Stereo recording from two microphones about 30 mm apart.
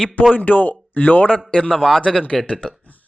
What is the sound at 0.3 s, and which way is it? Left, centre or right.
Speech, left.